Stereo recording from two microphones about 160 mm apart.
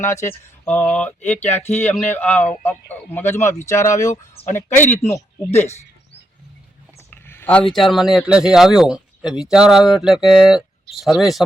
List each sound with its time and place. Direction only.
0.3 s speech: 15° left (ahead or behind)
4.0 s speech: 50° left (ahead or behind)
4.5 s speech: 15° left (ahead or behind)
7.1 s speech: 15° left (ahead or behind)